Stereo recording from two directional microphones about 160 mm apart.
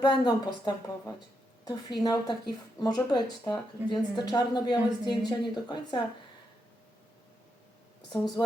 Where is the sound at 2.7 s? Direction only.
25° left (ahead or behind).